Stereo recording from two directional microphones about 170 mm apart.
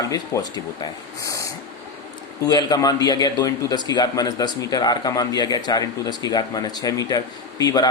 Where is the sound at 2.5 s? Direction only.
20° left (ahead or behind).